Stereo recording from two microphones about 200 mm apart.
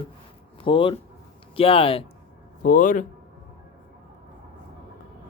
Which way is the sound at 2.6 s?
40° left (ahead or behind).